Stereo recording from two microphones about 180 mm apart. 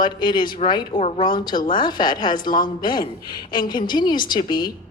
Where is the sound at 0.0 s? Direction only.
25° left (ahead or behind).